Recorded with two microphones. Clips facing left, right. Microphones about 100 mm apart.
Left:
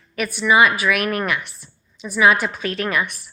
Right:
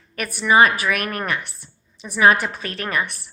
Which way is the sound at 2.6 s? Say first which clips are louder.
Left 3 dB; 40° right (ahead or behind).